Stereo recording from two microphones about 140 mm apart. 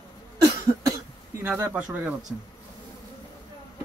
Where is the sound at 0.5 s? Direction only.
25° right (ahead or behind).